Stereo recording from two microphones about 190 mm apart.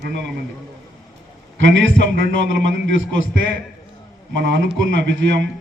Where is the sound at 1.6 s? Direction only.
75° right (ahead or behind).